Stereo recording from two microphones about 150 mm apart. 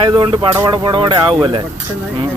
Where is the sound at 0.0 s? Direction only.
30° right (ahead or behind).